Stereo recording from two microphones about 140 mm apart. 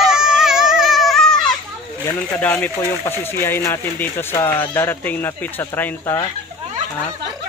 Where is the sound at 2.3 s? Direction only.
10° left (ahead or behind).